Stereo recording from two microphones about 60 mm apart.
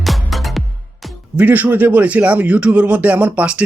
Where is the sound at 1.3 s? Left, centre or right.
Right.